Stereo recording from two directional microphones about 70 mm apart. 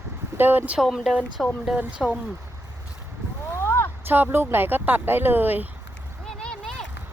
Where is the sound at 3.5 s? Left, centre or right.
Left.